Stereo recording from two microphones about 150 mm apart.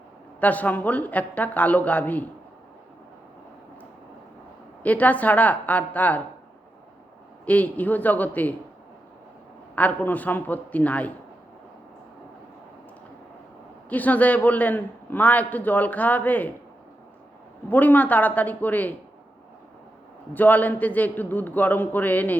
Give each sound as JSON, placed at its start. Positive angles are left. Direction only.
{"t": 0.3, "sound": "a man's voice", "side_deg": 10}
{"t": 4.8, "sound": "a man's voice", "side_deg": 10}
{"t": 7.4, "sound": "a man's voice", "side_deg": 10}
{"t": 9.7, "sound": "a man's voice", "side_deg": 10}
{"t": 13.9, "sound": "a man's voice", "side_deg": 10}
{"t": 17.7, "sound": "a man's voice", "side_deg": 10}
{"t": 20.3, "sound": "a man's voice", "side_deg": 10}